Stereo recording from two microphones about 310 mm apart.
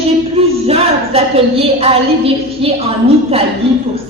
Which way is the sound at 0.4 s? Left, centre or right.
Centre.